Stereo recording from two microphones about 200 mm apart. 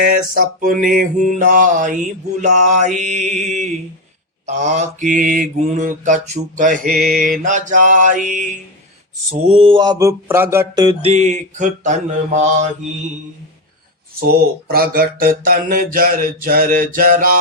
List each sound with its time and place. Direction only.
0.3 s mantra: 45° right (ahead or behind)
9.3 s mantra: 30° right (ahead or behind); by 10.8 s 10° right (ahead or behind)
10.8 s mantra: 30° right (ahead or behind)
14.3 s a sound: 50° right (ahead or behind)